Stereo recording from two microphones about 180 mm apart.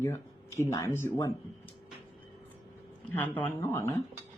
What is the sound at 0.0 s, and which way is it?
Speech, 15° left (ahead or behind).